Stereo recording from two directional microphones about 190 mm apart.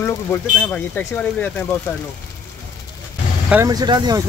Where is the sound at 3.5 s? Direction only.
15° right (ahead or behind).